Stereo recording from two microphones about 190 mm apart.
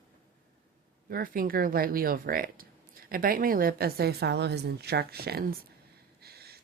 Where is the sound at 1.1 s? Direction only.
50° right (ahead or behind).